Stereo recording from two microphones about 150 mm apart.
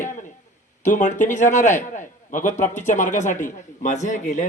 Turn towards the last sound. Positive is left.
turn(degrees=55)  # may be behind; listen again after turning